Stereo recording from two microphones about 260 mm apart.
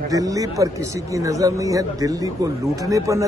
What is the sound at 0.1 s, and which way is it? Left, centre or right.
Speech, centre.